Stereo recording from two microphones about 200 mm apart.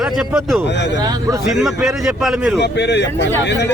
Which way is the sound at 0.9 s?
20° right (ahead or behind).